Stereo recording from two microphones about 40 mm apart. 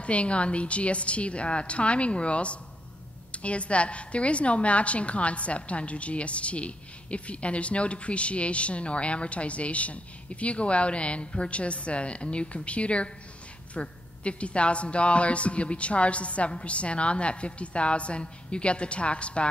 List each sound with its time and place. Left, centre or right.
0.0 s a woman's voice: left